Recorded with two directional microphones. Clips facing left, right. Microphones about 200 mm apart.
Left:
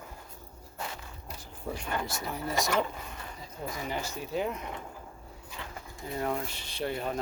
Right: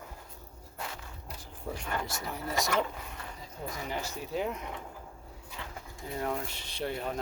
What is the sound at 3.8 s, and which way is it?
Speech, centre (ahead or behind).